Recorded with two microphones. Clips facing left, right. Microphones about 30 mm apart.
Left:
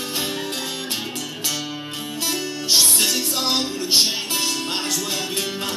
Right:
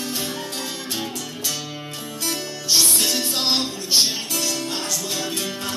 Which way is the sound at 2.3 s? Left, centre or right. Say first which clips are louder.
Left 1 dB; left.